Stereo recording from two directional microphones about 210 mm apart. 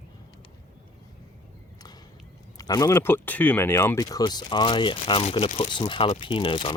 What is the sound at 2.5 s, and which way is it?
Speech, 15° left (ahead or behind).